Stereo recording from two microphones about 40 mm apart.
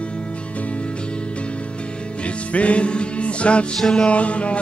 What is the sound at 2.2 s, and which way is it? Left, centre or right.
Music, left.